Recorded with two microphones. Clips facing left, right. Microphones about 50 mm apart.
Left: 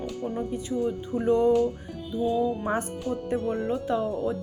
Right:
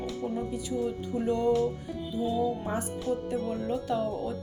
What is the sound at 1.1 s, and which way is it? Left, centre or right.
Speech, left.